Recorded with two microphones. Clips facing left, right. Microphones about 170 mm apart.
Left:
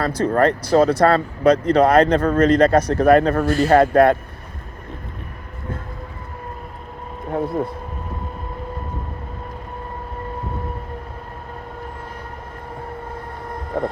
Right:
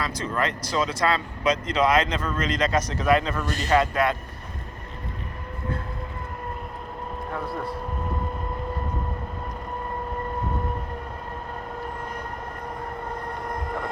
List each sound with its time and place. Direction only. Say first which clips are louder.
0.0 s speech: left 10 dB; 60° left (ahead or behind)
7.3 s speech: left 10 dB; 45° left (ahead or behind)